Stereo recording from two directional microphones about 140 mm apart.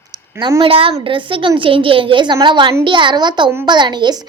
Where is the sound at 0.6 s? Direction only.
40° right (ahead or behind).